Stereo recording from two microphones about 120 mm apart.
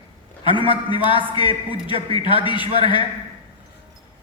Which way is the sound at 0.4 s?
45° left (ahead or behind).